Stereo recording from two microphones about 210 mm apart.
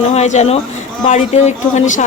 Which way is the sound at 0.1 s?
30° left (ahead or behind).